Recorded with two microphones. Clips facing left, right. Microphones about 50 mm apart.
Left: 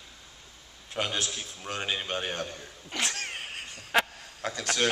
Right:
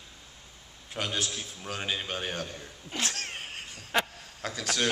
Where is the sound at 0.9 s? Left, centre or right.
Centre.